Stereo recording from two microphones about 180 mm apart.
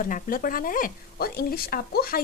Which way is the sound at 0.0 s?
50° left (ahead or behind).